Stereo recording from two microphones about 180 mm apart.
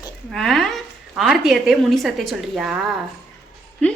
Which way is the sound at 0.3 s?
Centre (ahead or behind).